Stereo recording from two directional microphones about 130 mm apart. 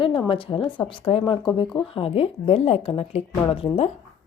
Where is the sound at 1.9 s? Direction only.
45° left (ahead or behind).